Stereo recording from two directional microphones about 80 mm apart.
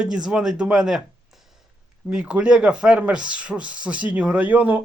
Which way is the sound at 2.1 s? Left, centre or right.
Centre.